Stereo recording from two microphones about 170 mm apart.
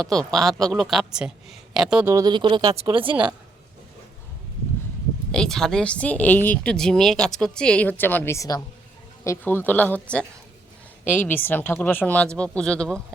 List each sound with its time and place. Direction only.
0.0 s a man's voice: 5° left (ahead or behind)
0.3 s speech: 20° right (ahead or behind)
0.8 s a man's voice: centre (ahead or behind)
2.0 s speech: 20° right (ahead or behind)
5.3 s a woman's voice: 5° left (ahead or behind)